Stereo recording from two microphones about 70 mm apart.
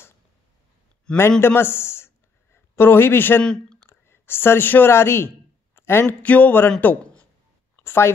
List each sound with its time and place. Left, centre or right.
1.1 s a man's voice: centre
1.4 s speech: left
5.8 s a sound: left
6.0 s speech: left